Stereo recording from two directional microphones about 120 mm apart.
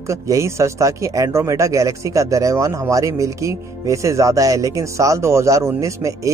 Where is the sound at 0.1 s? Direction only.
25° right (ahead or behind).